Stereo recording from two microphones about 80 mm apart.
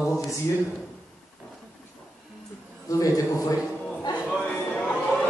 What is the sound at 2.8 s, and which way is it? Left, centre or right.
Speech, left.